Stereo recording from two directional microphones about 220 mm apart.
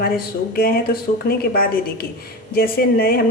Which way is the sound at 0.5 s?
45° left (ahead or behind).